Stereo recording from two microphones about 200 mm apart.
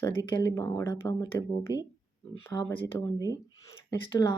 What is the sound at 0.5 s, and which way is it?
Speech, 15° left (ahead or behind).